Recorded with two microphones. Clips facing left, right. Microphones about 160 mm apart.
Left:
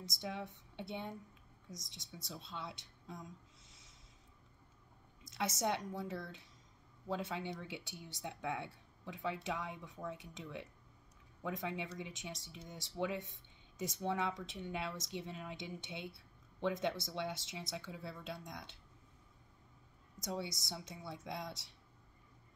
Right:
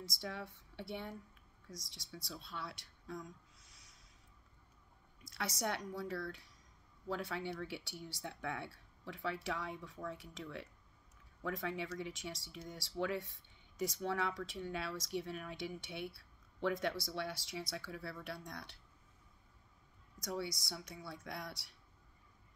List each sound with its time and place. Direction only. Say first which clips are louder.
0.0 s a woman's voice: left 1 dB; 20° left (ahead or behind)
5.2 s speech: left 3 dB; 20° left (ahead or behind)
20.2 s speech: right 1 dB; 20° left (ahead or behind)